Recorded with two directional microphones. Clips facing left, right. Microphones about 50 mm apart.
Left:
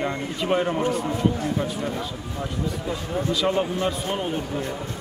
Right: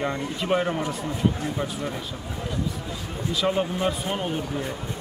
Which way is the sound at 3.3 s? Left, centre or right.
Centre.